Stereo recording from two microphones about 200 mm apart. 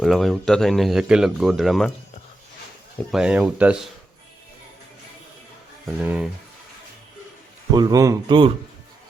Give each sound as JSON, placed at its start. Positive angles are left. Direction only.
{"t": 0.0, "sound": "speech", "side_deg": 0}
{"t": 3.1, "sound": "speech", "side_deg": -5}
{"t": 5.8, "sound": "speech", "side_deg": -5}
{"t": 7.7, "sound": "speech", "side_deg": -20}